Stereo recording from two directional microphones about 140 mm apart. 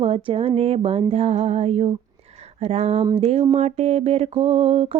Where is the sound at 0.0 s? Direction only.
45° right (ahead or behind).